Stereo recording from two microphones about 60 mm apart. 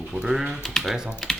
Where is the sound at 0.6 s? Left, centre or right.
Centre.